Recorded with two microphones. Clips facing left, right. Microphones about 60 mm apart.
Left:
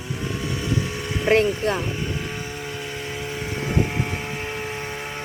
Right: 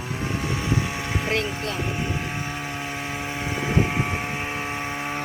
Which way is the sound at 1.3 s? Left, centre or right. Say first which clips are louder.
Left 11 dB; left.